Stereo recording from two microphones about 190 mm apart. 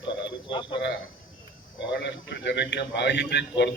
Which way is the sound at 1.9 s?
65° left (ahead or behind).